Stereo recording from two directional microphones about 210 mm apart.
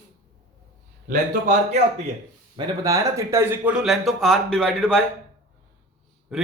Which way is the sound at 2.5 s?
15° right (ahead or behind).